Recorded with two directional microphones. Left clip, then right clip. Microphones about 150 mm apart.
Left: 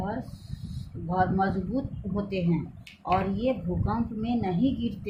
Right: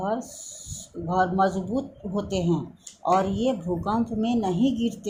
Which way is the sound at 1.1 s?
30° right (ahead or behind).